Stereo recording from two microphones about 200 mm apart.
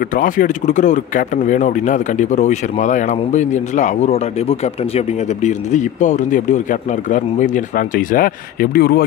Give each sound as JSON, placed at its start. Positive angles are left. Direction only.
{"t": 0.1, "sound": "speech", "side_deg": 40}